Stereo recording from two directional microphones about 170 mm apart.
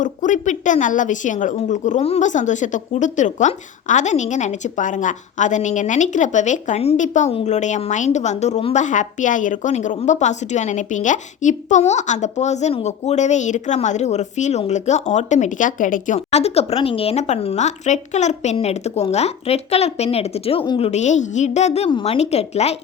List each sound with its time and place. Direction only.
0.0 s a woman's voice: 50° left (ahead or behind)